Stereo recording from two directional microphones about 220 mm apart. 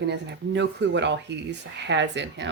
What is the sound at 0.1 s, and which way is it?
Speech, 55° right (ahead or behind).